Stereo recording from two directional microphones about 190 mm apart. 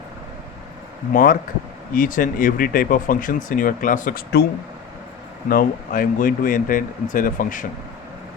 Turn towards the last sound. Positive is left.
turn(degrees=45)  # may be behind; listen again after turning